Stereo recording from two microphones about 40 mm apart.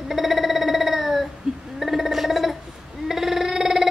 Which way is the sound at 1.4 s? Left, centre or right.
Centre.